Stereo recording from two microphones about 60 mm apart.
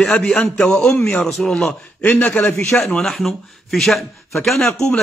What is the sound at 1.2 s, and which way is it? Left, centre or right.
Speech, centre.